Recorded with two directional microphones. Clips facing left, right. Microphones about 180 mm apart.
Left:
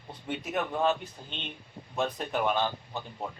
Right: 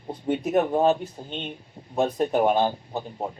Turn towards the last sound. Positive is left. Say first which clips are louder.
# right 6 dB
turn(degrees=-40)  # may be behind; listen again after turning